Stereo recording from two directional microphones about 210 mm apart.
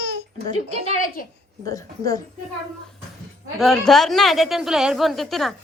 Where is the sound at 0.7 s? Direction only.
30° right (ahead or behind).